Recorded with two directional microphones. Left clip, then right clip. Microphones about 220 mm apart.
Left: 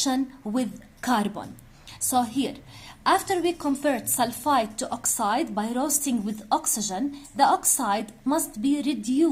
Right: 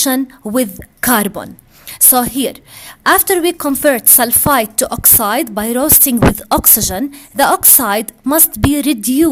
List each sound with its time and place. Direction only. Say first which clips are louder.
0.0 s a woman's voice: right 10 dB; 45° right (ahead or behind)